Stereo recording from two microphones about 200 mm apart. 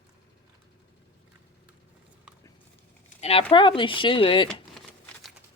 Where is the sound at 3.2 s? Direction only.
25° left (ahead or behind).